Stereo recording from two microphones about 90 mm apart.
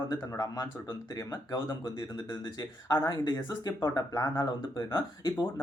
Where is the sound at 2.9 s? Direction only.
50° left (ahead or behind).